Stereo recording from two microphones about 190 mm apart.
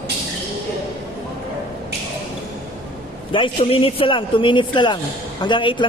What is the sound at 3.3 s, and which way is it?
Speech, 30° left (ahead or behind).